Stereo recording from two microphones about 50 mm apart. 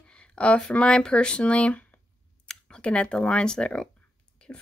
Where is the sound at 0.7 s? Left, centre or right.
Left.